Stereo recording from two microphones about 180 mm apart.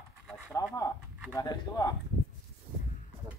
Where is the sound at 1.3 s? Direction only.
20° left (ahead or behind).